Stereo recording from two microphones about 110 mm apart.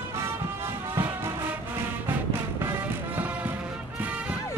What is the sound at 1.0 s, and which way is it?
Music, 20° right (ahead or behind).